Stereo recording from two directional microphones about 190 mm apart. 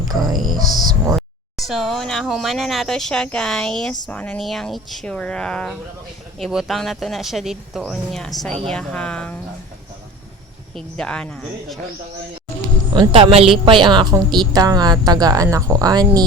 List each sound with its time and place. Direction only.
0.1 s music: 20° right (ahead or behind)
0.5 s a woman's voice: 20° right (ahead or behind)
1.1 s speech: centre (ahead or behind)
10.8 s speech: 5° left (ahead or behind)
12.9 s a woman's voice: 25° right (ahead or behind)